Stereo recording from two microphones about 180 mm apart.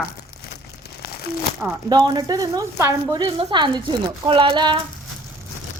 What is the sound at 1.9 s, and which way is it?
Speech, 25° right (ahead or behind).